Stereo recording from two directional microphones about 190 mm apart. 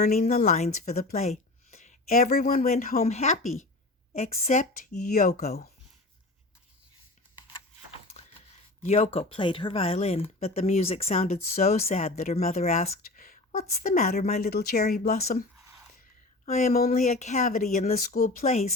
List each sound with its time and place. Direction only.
0.2 s speech: 45° left (ahead or behind)
0.9 s speech: 50° left (ahead or behind)
1.2 s a sound: 35° left (ahead or behind)
2.3 s speech: 50° left (ahead or behind)
3.0 s speech: 35° left (ahead or behind); by 5.6 s 50° left (ahead or behind)
8.1 s speech: 35° left (ahead or behind); by 15.4 s 50° left (ahead or behind)
16.5 s speech: 40° left (ahead or behind)
18.4 s speech: 35° left (ahead or behind)